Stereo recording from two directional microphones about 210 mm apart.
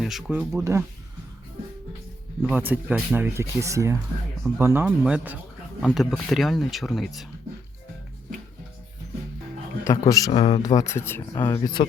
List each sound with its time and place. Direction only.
0.0 s speech: centre (ahead or behind)
0.5 s speech: 15° right (ahead or behind)
2.4 s speech: 10° right (ahead or behind)
9.8 s speech: 15° left (ahead or behind)